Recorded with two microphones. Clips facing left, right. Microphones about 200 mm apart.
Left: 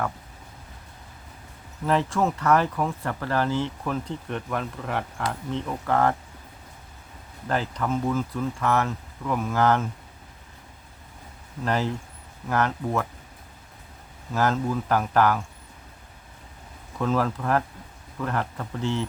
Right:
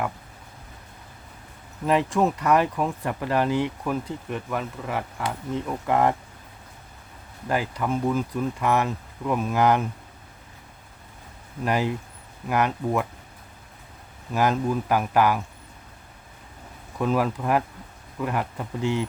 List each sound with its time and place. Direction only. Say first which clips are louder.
1.9 s speech: right 2 dB; 15° right (ahead or behind)
7.4 s speech: right 1 dB; 10° right (ahead or behind)
11.6 s speech: right 1 dB; 15° right (ahead or behind)
14.3 s speech: right 1 dB; 15° right (ahead or behind)
17.0 s speech: right 1 dB; 15° right (ahead or behind)